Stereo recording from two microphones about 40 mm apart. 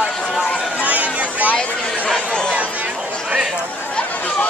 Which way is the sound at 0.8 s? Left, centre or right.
Right.